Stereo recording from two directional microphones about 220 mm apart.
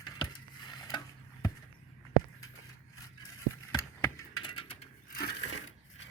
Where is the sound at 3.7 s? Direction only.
15° left (ahead or behind).